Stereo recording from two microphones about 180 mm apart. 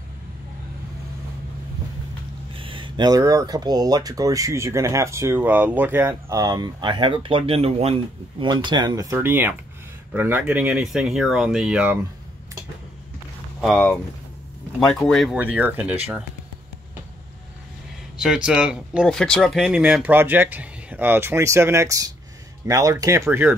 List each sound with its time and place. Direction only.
2.5 s speech: 30° right (ahead or behind); by 12.0 s 10° right (ahead or behind)
13.6 s speech: 5° left (ahead or behind)
18.1 s speech: 5° right (ahead or behind)